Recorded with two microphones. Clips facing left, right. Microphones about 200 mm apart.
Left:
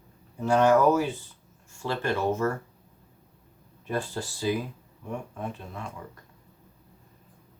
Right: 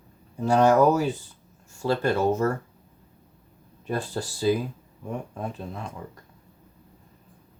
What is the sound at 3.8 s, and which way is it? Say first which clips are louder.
Speech: right 2 dB; 35° right (ahead or behind).